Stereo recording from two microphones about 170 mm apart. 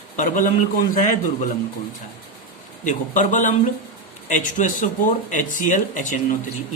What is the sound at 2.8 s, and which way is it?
Speech, 45° left (ahead or behind).